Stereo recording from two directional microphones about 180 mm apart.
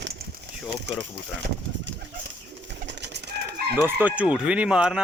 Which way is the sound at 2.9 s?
75° right (ahead or behind).